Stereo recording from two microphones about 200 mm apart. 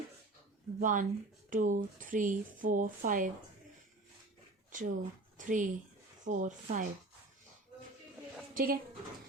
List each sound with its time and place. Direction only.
0.8 s speech: 40° right (ahead or behind)
4.7 s speech: 40° right (ahead or behind)
8.5 s speech: 45° right (ahead or behind)